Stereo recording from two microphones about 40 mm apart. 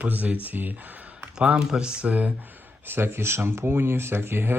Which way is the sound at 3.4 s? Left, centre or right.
Right.